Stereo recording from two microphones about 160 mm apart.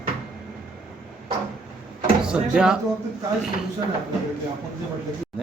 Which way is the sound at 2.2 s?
5° right (ahead or behind).